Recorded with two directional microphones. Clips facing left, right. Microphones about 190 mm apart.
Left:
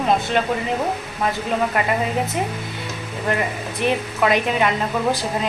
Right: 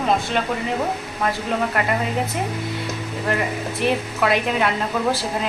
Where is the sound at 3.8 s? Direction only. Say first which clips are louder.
Left 1 dB; centre (ahead or behind).